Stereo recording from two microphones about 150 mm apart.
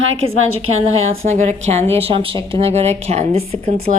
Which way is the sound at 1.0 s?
50° right (ahead or behind).